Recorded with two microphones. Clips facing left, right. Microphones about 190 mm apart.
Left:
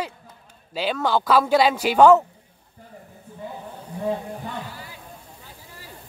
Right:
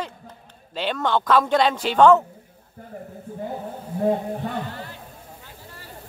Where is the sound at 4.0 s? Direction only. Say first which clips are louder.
Right 5 dB; 50° right (ahead or behind).